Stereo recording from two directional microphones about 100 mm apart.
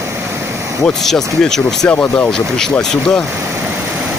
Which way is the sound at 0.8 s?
5° left (ahead or behind).